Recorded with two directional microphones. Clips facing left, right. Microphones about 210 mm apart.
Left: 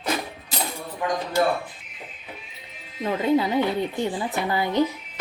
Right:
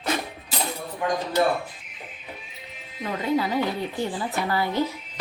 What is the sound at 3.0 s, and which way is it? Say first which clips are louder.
Music: left 3 dB; 25° left (ahead or behind).